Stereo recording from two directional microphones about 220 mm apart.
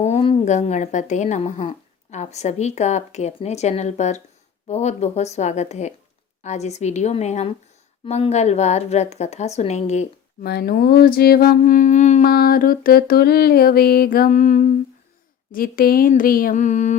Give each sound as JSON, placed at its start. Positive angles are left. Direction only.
{"t": 0.0, "sound": "a woman's voice", "side_deg": 25}
{"t": 10.4, "sound": "humming", "side_deg": 45}
{"t": 15.5, "sound": "speech", "side_deg": 40}